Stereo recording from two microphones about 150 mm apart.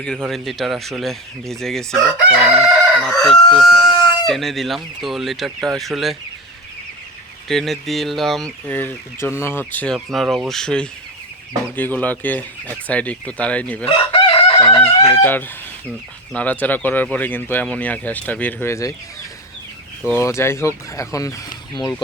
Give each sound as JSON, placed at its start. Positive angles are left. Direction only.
{"t": 0.0, "sound": "speech", "side_deg": 5}
{"t": 2.6, "sound": "chicken", "side_deg": 5}
{"t": 5.6, "sound": "speech", "side_deg": 0}
{"t": 7.4, "sound": "speech", "side_deg": 0}
{"t": 13.8, "sound": "chicken", "side_deg": 40}
{"t": 14.6, "sound": "speech", "side_deg": 20}
{"t": 20.1, "sound": "speech", "side_deg": 15}